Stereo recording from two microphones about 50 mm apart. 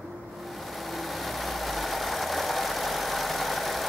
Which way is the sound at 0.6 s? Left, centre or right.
Centre.